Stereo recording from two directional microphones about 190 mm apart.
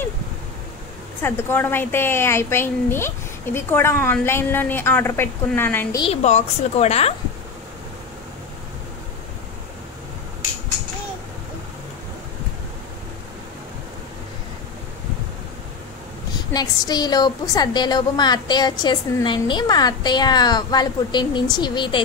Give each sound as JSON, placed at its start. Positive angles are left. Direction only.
{"t": 1.2, "sound": "speech", "side_deg": 10}
{"t": 5.9, "sound": "a woman's voice", "side_deg": 35}
{"t": 16.3, "sound": "a woman's voice", "side_deg": 20}